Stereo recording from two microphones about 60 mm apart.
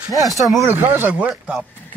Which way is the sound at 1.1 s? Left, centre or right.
Right.